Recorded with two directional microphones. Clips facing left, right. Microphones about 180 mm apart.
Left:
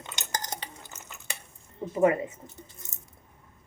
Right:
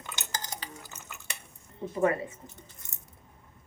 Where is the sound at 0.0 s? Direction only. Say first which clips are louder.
Left 3 dB; 25° left (ahead or behind).